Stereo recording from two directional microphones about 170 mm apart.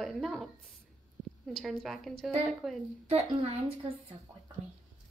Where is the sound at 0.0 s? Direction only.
Centre (ahead or behind).